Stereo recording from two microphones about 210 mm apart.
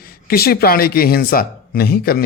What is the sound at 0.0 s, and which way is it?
Speech, 45° left (ahead or behind).